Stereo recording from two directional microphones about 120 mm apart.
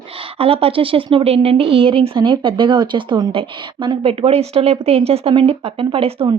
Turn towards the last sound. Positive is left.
turn(degrees=-50)  # may be behind; listen again after turning